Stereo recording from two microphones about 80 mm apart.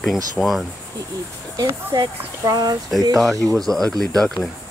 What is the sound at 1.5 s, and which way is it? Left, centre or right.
Speech, right.